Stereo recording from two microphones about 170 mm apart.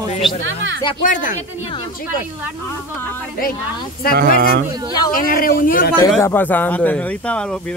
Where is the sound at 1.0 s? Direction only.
50° left (ahead or behind).